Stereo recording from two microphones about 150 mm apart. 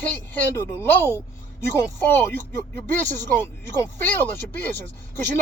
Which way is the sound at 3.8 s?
15° left (ahead or behind).